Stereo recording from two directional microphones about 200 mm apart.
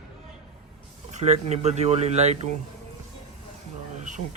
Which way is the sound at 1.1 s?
35° right (ahead or behind).